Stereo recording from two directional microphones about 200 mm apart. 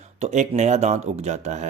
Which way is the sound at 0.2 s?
35° right (ahead or behind).